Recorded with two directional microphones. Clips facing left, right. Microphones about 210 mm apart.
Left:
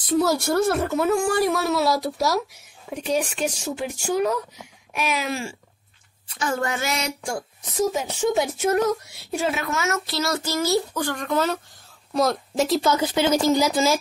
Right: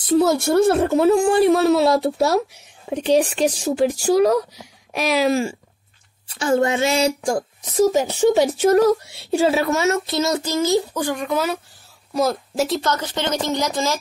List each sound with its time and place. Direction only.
0.0 s a woman's voice: 25° right (ahead or behind); by 13.9 s 5° left (ahead or behind)